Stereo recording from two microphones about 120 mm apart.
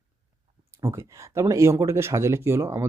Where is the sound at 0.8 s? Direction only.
25° right (ahead or behind).